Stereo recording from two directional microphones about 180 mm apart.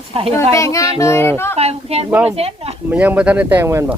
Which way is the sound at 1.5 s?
35° right (ahead or behind).